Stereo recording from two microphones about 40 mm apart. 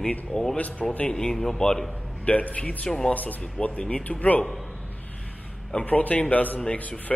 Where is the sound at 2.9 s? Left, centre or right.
Centre.